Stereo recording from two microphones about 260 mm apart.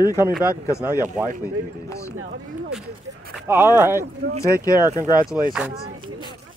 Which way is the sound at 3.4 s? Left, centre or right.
Centre.